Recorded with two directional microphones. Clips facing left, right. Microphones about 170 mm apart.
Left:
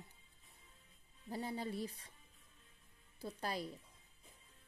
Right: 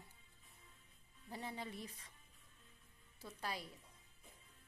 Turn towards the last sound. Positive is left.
turn(degrees=40)  # may be behind; listen again after turning